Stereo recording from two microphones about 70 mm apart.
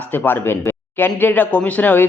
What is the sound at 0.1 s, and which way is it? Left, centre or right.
Speech, left.